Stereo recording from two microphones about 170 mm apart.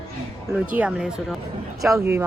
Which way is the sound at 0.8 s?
5° right (ahead or behind).